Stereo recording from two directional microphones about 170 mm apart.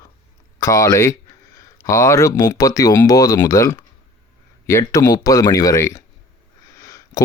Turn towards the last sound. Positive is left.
turn(degrees=20)  # may be behind; listen again after turning